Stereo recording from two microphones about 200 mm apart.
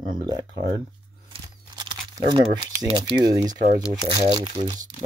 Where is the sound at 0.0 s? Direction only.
20° right (ahead or behind).